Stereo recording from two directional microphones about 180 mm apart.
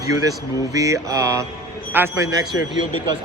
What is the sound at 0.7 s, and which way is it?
Speech, 20° right (ahead or behind).